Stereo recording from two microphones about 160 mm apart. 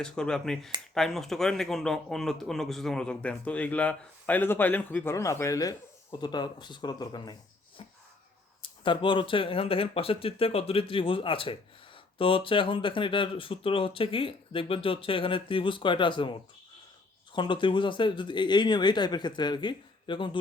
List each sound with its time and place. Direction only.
0.0 s speech: 5° left (ahead or behind); by 7.3 s 25° left (ahead or behind)
8.6 s speech: 30° left (ahead or behind)